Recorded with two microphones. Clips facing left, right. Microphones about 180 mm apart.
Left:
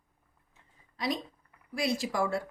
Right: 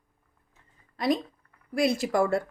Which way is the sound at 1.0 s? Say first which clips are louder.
Right 7 dB; 50° right (ahead or behind).